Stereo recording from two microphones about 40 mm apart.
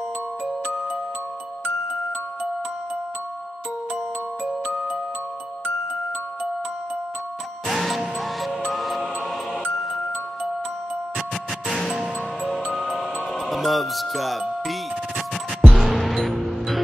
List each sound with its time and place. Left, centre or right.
4.7 s music: right
7.6 s music: centre
11.1 s music: centre
13.3 s speech: centre
14.7 s music: centre